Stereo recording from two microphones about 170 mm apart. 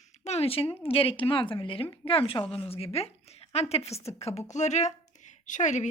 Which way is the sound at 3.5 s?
40° left (ahead or behind).